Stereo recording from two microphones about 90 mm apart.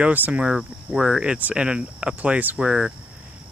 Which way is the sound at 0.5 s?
5° right (ahead or behind).